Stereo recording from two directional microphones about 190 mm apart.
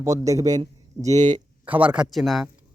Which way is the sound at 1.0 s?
40° right (ahead or behind).